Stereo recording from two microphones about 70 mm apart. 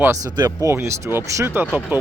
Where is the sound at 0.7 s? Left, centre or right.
Right.